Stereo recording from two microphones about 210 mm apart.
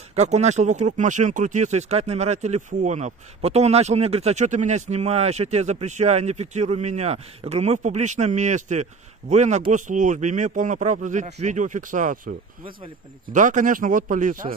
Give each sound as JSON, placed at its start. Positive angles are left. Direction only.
{"t": 0.1, "sound": "speech", "side_deg": -30}